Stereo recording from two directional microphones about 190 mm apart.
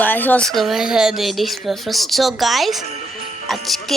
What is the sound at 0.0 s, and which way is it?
A woman's voice, 10° left (ahead or behind).